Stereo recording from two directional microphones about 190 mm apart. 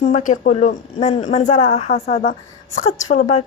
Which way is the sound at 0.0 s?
45° left (ahead or behind).